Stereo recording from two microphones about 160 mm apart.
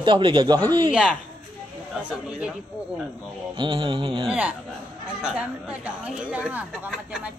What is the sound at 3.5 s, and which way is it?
Speech, 30° right (ahead or behind).